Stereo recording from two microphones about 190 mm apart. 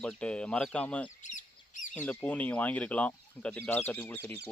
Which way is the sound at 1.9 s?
5° left (ahead or behind).